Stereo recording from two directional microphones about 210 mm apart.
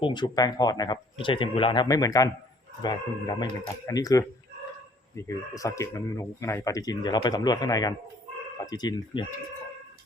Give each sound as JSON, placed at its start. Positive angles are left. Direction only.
{"t": 0.0, "sound": "speech", "side_deg": 20}